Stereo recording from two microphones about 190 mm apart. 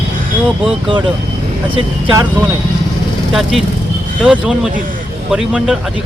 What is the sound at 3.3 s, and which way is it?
Speech, centre (ahead or behind).